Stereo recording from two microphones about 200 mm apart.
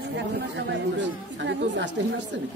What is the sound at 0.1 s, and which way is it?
Speech, 60° right (ahead or behind).